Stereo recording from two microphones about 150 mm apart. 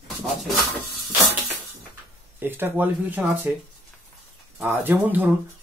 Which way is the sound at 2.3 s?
15° right (ahead or behind).